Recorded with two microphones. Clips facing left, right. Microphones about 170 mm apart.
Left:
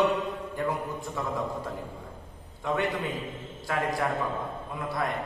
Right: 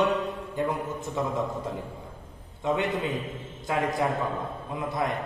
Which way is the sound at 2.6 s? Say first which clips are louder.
Right 2 dB; 20° right (ahead or behind).